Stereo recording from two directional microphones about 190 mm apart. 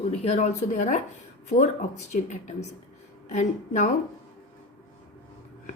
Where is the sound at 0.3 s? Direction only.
35° left (ahead or behind).